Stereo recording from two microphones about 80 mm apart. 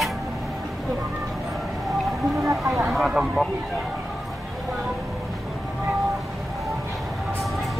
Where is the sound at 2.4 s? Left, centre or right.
Right.